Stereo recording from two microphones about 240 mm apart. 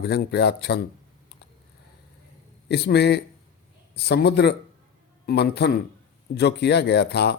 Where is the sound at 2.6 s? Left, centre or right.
Left.